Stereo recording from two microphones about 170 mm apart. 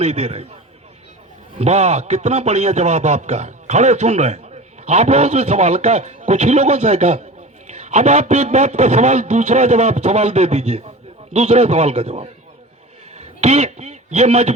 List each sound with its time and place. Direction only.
0.0 s a man's voice: 40° right (ahead or behind)
1.5 s a man's voice: 40° right (ahead or behind)
13.1 s a sound: 40° right (ahead or behind)